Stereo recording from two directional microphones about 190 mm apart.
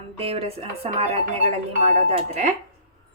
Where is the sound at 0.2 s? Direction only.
30° right (ahead or behind).